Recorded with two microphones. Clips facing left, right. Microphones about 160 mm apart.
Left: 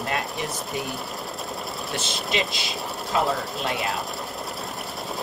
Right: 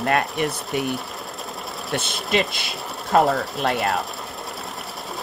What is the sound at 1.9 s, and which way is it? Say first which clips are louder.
Speech: right 5 dB; 60° right (ahead or behind).